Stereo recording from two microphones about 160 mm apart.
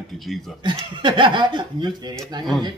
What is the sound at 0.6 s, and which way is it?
Speech, 30° right (ahead or behind).